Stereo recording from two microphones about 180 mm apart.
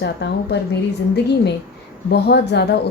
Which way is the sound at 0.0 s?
70° left (ahead or behind).